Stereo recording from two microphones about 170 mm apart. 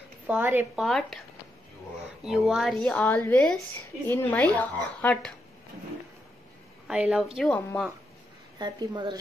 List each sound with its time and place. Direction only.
0.3 s speech: 10° right (ahead or behind)
0.7 s speech: centre (ahead or behind)
2.2 s a woman's voice: centre (ahead or behind)
6.9 s speech: 5° right (ahead or behind)
7.3 s speech: 5° left (ahead or behind)
8.5 s a woman's voice: 25° right (ahead or behind)